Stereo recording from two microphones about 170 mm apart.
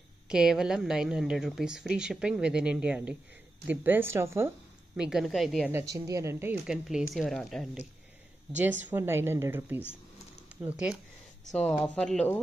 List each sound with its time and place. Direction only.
0.3 s speech: 5° right (ahead or behind)
4.9 s speech: 5° right (ahead or behind)
5.7 s speech: 15° right (ahead or behind)
6.7 s speech: 5° right (ahead or behind)
8.5 s speech: 10° right (ahead or behind)
11.5 s speech: 10° left (ahead or behind)